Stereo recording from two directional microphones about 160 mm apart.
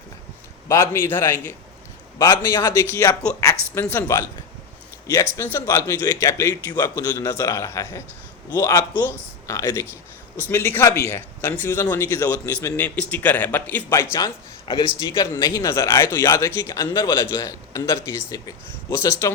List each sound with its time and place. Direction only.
0.7 s speech: 15° left (ahead or behind)